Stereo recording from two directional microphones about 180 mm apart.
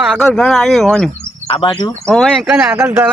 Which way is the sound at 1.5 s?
25° left (ahead or behind).